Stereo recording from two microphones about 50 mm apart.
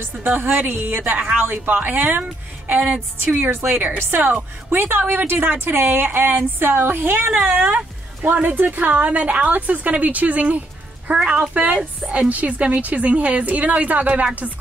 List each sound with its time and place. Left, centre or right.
0.0 s a woman's voice: right
3.9 s speech: right
4.6 s a woman's voice: right